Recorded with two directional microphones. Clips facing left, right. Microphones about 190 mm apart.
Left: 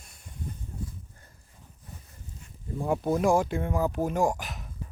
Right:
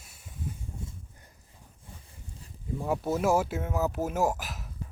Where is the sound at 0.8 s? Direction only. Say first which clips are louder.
Left 6 dB; 25° right (ahead or behind).